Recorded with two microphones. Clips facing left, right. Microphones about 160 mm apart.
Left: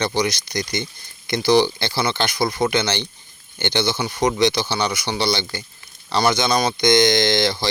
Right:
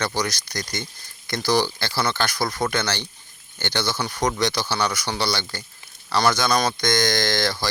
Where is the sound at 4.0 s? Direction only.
10° left (ahead or behind).